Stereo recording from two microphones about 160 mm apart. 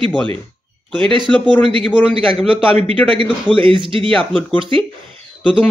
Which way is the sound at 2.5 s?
35° right (ahead or behind).